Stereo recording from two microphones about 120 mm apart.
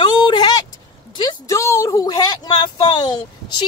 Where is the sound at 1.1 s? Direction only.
40° left (ahead or behind).